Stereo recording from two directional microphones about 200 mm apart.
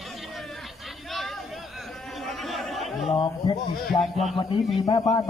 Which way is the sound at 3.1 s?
25° left (ahead or behind).